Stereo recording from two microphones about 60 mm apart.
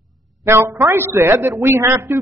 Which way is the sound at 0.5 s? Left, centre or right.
Right.